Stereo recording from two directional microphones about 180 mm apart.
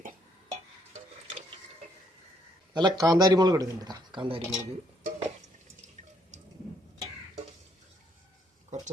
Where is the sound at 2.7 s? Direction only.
20° right (ahead or behind).